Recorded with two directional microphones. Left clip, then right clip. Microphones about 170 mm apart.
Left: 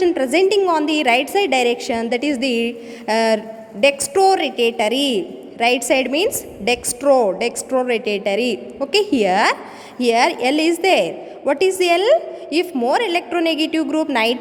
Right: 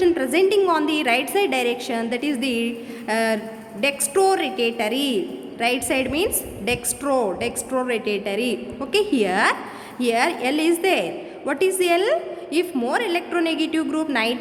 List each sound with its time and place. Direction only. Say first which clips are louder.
0.0 s a woman's voice: left 3 dB; 25° left (ahead or behind)